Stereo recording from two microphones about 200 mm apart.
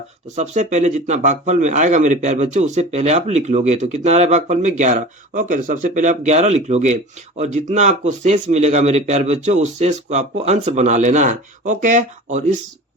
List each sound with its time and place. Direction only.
0.3 s speech: 35° right (ahead or behind)